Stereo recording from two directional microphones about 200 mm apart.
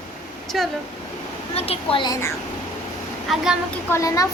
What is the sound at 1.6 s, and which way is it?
Speech, 30° left (ahead or behind).